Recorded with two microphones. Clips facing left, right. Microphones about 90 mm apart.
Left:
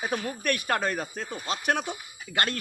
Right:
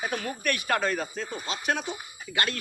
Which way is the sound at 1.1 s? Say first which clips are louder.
Left 1 dB; 55° left (ahead or behind).